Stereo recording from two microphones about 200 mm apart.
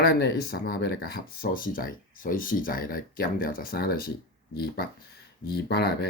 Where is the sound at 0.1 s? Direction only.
55° left (ahead or behind).